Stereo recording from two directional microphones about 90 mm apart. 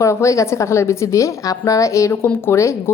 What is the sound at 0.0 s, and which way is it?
A woman's voice, 35° left (ahead or behind).